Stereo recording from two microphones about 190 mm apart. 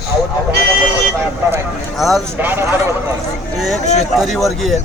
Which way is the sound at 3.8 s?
35° left (ahead or behind).